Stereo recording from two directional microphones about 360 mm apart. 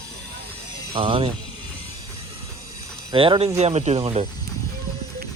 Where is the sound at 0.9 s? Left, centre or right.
Centre.